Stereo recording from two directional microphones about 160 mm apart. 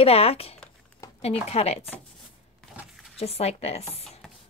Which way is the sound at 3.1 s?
40° left (ahead or behind).